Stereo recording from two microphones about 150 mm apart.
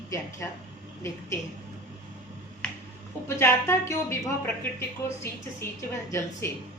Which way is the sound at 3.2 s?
15° left (ahead or behind).